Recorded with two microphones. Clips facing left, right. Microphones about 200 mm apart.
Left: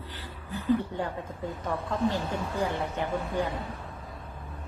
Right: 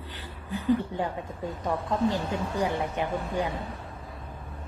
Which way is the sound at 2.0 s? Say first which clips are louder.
Left 1 dB; 15° right (ahead or behind).